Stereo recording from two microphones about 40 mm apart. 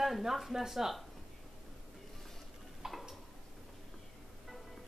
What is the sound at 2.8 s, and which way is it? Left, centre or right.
Tick-tock, centre.